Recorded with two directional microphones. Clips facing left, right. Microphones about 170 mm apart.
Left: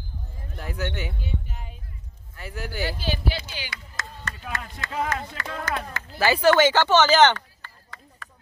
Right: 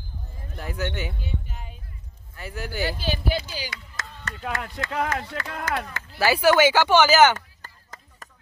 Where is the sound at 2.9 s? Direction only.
45° right (ahead or behind).